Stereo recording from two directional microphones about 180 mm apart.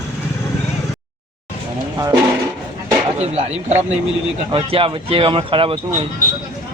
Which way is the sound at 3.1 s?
35° right (ahead or behind).